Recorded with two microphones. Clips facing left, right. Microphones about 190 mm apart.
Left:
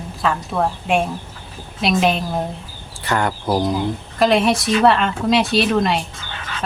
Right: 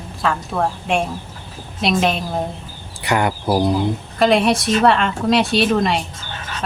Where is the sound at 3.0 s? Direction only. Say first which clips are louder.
Right 2 dB; 15° right (ahead or behind).